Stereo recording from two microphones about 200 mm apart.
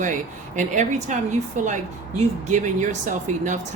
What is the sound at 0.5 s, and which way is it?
Speech, 35° right (ahead or behind).